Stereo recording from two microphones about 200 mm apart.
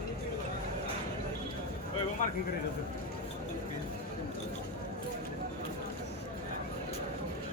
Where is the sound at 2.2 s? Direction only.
40° left (ahead or behind).